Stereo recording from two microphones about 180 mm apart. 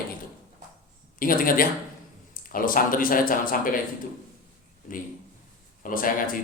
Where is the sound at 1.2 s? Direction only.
50° left (ahead or behind).